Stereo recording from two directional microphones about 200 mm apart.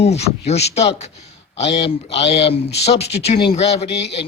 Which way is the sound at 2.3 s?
30° left (ahead or behind).